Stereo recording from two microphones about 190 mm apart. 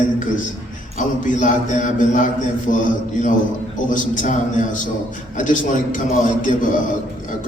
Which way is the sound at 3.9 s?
40° left (ahead or behind).